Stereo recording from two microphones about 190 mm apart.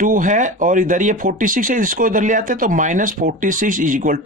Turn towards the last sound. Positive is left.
turn(degrees=-45)  # may be behind; listen again after turning